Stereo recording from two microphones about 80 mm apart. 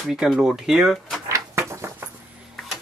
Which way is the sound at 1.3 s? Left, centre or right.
Right.